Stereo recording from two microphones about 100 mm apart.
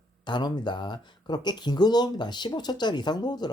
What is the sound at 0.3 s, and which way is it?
A woman's voice, 50° left (ahead or behind).